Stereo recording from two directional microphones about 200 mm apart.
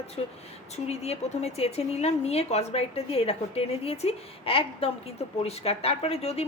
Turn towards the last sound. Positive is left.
turn(degrees=30)  # may be behind; listen again after turning